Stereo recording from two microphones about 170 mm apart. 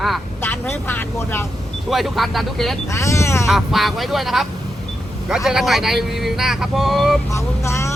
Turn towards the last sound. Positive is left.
turn(degrees=15)  # may be behind; listen again after turning